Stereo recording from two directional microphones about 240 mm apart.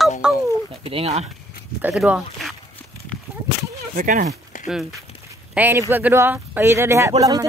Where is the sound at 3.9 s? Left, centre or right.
Right.